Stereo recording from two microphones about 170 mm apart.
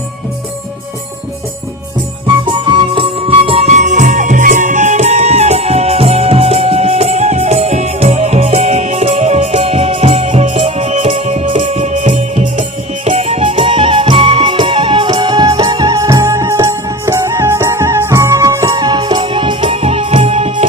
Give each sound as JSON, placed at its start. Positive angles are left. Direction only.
{"t": 2.2, "sound": "music", "side_deg": -30}